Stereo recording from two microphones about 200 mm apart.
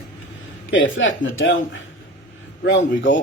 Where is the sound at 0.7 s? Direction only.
75° left (ahead or behind).